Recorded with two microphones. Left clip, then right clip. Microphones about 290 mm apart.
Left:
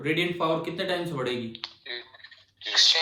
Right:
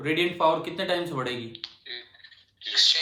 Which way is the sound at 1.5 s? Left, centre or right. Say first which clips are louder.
Left 2 dB; centre.